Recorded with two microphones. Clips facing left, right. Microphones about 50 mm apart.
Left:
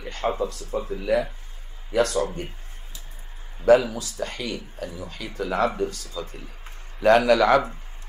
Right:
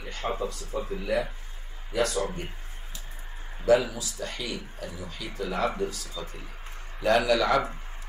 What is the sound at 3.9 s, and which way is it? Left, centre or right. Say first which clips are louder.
Speech: left 4 dB; left.